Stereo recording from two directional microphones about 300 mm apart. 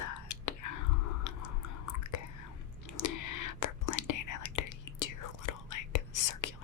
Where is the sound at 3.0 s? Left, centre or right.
Left.